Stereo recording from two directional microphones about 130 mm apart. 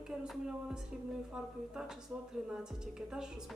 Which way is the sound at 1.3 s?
5° right (ahead or behind).